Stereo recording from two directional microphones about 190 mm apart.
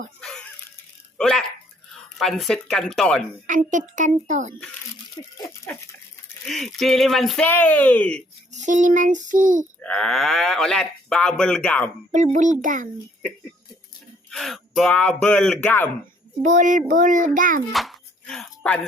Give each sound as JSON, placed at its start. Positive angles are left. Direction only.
{"t": 0.2, "sound": "a sound", "side_deg": 5}
{"t": 1.2, "sound": "speech", "side_deg": 5}
{"t": 3.4, "sound": "a child's voice", "side_deg": -40}
{"t": 6.4, "sound": "speech", "side_deg": 0}
{"t": 8.5, "sound": "child singing", "side_deg": -40}
{"t": 9.8, "sound": "speech", "side_deg": 5}
{"t": 12.1, "sound": "a child's voice", "side_deg": -40}
{"t": 14.3, "sound": "speech", "side_deg": 0}
{"t": 16.4, "sound": "a child's voice", "side_deg": -40}
{"t": 16.9, "sound": "child singing", "side_deg": -40}
{"t": 17.7, "sound": "a sound", "side_deg": 0}